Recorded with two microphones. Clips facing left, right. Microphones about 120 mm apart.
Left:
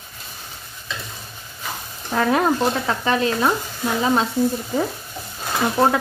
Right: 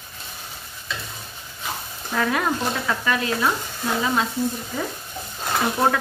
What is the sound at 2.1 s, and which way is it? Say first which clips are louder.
Stir: left 5 dB; 30° left (ahead or behind).